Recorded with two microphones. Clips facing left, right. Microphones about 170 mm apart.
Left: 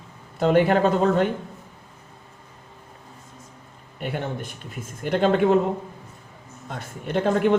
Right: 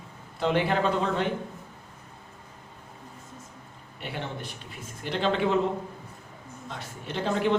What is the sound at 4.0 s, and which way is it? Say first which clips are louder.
Speech: left 6 dB; 50° left (ahead or behind).